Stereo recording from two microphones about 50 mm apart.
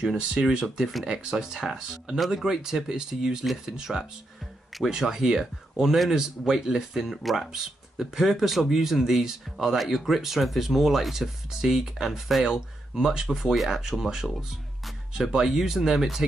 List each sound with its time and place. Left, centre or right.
0.3 s speech: centre